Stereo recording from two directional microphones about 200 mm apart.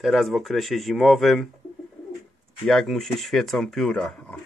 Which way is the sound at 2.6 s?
Centre (ahead or behind).